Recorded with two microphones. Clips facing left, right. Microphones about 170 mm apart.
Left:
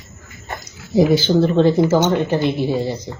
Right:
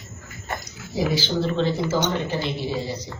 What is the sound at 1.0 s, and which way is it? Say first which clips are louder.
Speech: left 9 dB; 55° left (ahead or behind).